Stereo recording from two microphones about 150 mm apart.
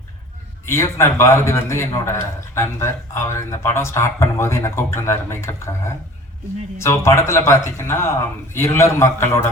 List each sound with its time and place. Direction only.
0.6 s speech: 15° left (ahead or behind)